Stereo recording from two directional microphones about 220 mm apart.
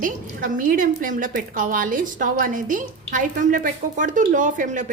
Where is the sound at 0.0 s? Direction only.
40° right (ahead or behind).